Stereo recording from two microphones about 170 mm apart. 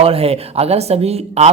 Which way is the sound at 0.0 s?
35° right (ahead or behind).